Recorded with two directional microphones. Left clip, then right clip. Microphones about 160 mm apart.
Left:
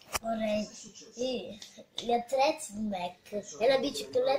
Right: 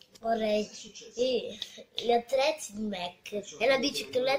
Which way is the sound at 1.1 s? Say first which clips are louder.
Right 5 dB; 5° right (ahead or behind).